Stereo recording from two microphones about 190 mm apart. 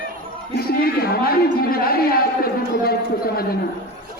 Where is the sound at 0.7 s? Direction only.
55° left (ahead or behind).